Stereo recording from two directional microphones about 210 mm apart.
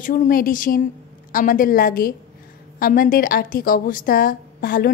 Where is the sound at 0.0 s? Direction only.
40° left (ahead or behind).